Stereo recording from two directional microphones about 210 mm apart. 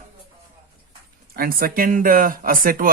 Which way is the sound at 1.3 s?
45° right (ahead or behind).